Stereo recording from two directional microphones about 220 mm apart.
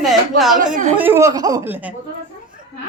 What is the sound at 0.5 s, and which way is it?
Speech, 35° right (ahead or behind).